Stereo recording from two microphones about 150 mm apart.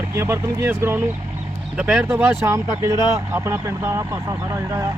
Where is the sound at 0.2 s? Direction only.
15° right (ahead or behind).